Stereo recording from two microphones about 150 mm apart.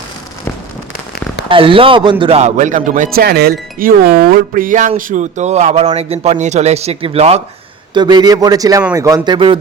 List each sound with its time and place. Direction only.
1.5 s speech: 35° right (ahead or behind)
2.4 s a man's voice: 55° right (ahead or behind); by 3.5 s 90° right
3.8 s speech: 75° right (ahead or behind); by 7.4 s 45° right (ahead or behind)
7.9 s a man's voice: 30° right (ahead or behind)